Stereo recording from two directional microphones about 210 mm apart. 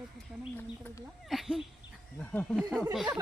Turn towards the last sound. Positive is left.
turn(degrees=0)  # may be behind; listen again after turning